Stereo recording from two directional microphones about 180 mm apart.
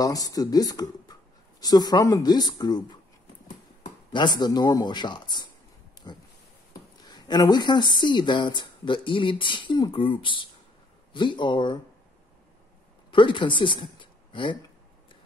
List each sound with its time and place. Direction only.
0.0 s speech: 20° left (ahead or behind)
4.1 s speech: 25° left (ahead or behind)
6.0 s a sound: 25° left (ahead or behind)
7.1 s speech: 25° left (ahead or behind)
13.1 s speech: 25° left (ahead or behind)